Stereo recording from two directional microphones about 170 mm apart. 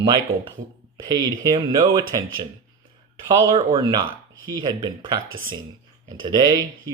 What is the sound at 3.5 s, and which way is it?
Speech, 25° right (ahead or behind).